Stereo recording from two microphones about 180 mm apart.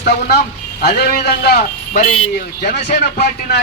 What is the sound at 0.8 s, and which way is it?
Speech, 65° left (ahead or behind).